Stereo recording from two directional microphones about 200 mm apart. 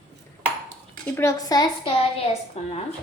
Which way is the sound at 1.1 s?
15° left (ahead or behind).